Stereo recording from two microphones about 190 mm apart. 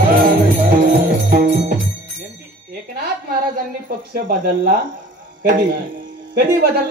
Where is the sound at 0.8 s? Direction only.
55° right (ahead or behind).